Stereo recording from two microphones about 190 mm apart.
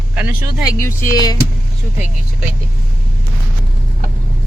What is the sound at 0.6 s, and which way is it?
Speech, 15° left (ahead or behind).